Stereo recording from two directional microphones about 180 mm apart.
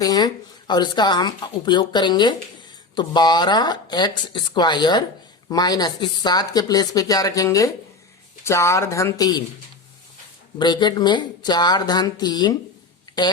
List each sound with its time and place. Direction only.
0.0 s a sound: 20° left (ahead or behind)
0.7 s speech: 25° left (ahead or behind)
10.6 s speech: 25° left (ahead or behind)